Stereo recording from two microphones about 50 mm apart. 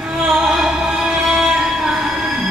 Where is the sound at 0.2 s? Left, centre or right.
Centre.